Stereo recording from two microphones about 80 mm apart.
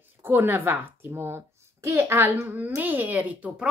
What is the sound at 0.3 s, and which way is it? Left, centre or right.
A child's voice, right.